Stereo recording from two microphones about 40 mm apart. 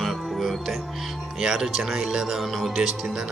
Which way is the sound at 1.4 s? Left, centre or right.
Centre.